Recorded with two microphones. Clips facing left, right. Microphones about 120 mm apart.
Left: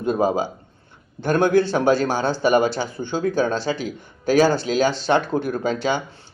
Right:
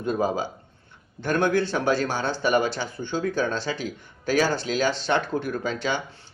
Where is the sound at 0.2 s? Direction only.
30° left (ahead or behind).